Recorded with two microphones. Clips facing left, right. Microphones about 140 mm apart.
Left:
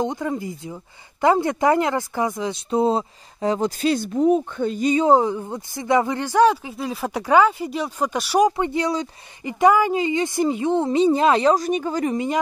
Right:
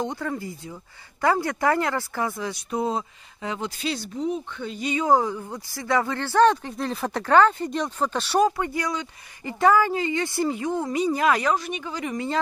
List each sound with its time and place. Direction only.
0.0 s speech: 20° left (ahead or behind); by 5.0 s 45° left (ahead or behind)
5.0 s speech: 20° left (ahead or behind); by 12.1 s 40° left (ahead or behind)
12.1 s speech: 20° left (ahead or behind)